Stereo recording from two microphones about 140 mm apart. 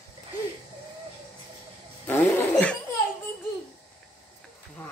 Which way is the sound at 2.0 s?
15° left (ahead or behind).